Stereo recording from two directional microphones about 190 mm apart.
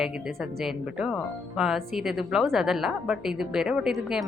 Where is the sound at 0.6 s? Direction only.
Centre (ahead or behind).